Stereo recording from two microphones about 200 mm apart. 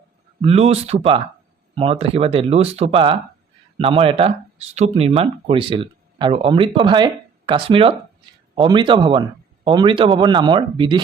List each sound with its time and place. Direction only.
0.4 s speech: 30° right (ahead or behind)